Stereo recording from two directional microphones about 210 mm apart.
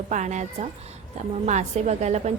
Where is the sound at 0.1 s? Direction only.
35° right (ahead or behind).